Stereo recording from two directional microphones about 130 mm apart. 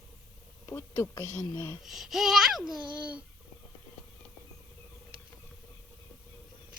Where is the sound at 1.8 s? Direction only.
Centre (ahead or behind).